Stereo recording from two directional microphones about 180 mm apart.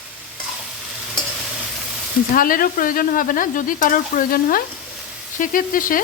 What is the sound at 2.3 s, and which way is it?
Speech, 50° left (ahead or behind).